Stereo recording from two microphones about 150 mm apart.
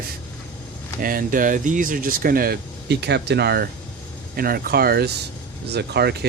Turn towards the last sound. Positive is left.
turn(degrees=-90)